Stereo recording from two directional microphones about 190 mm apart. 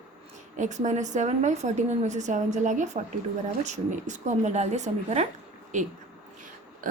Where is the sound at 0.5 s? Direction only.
40° right (ahead or behind).